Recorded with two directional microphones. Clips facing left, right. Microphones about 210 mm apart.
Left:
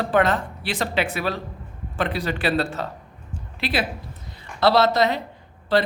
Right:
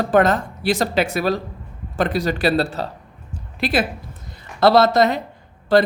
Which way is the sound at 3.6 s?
45° right (ahead or behind).